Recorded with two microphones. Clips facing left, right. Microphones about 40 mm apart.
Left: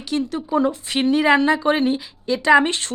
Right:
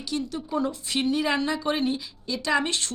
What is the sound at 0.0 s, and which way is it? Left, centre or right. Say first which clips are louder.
Speech: left 6 dB; left.